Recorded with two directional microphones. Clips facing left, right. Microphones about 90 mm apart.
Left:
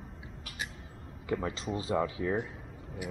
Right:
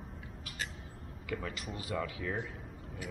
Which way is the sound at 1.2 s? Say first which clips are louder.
Left 6 dB; 25° left (ahead or behind).